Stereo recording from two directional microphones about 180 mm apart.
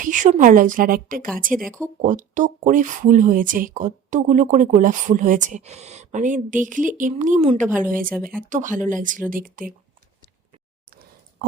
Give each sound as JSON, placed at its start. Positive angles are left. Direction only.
{"t": 0.0, "sound": "speech", "side_deg": -45}
{"t": 7.9, "sound": "speech", "side_deg": -50}